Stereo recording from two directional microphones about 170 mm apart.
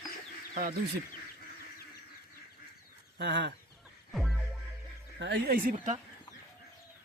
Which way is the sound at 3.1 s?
90° right.